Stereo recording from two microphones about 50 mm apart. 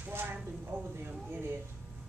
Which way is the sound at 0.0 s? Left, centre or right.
Right.